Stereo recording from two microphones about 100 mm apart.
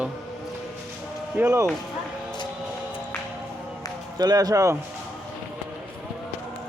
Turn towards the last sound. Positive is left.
turn(degrees=-30)  # may be behind; listen again after turning